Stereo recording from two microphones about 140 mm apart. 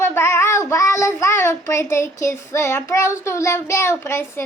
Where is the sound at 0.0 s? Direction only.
15° left (ahead or behind).